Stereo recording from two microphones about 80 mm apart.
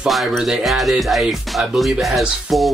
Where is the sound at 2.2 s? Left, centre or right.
Centre.